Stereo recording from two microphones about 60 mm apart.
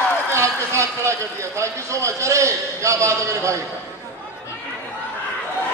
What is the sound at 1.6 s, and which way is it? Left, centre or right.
A man's voice, right.